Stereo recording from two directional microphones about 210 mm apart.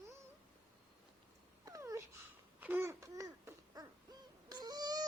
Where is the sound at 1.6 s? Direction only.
15° right (ahead or behind).